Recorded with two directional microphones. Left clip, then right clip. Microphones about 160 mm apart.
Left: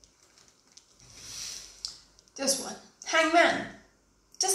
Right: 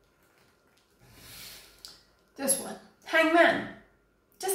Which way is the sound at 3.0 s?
Centre (ahead or behind).